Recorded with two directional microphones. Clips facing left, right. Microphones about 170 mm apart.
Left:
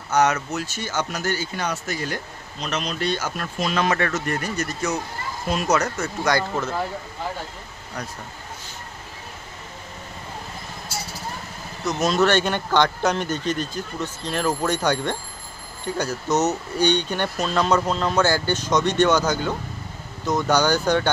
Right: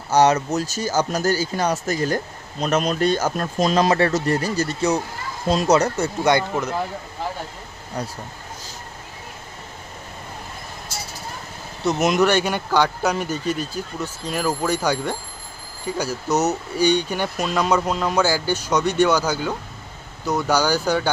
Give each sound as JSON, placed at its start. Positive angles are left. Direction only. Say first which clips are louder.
{"t": 0.1, "sound": "speech", "louder": "right 4 dB", "side_deg": -35}
{"t": 6.5, "sound": "speech", "louder": "right 2 dB", "side_deg": -15}
{"t": 8.0, "sound": "speech", "louder": "right 4 dB", "side_deg": -30}
{"t": 11.9, "sound": "speech", "louder": "right 2 dB", "side_deg": -20}